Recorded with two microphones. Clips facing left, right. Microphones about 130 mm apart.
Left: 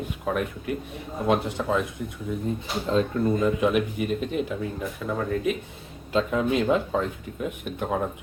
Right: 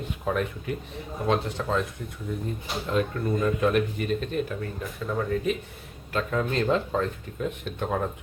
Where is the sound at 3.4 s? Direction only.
15° left (ahead or behind).